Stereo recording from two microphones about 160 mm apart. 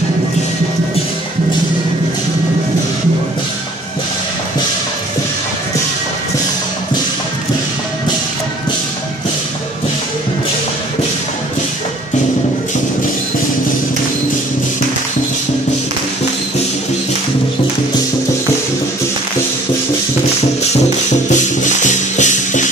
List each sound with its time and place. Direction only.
21.3 s music: 50° left (ahead or behind)